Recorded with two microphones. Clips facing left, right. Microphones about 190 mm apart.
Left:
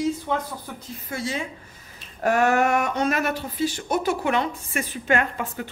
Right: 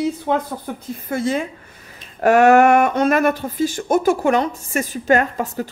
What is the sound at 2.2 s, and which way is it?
Speech, 75° right (ahead or behind).